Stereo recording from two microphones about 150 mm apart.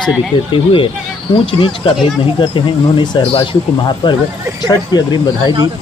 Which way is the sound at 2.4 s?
30° left (ahead or behind).